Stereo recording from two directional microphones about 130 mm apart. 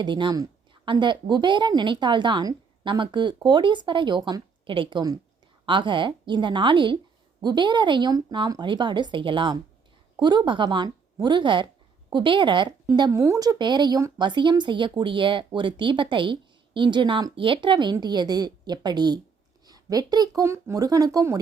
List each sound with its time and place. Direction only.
0.0 s a woman's voice: 35° right (ahead or behind)
13.1 s a woman's voice: 25° right (ahead or behind)